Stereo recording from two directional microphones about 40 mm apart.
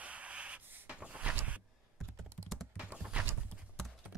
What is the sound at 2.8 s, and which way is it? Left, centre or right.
Horse, right.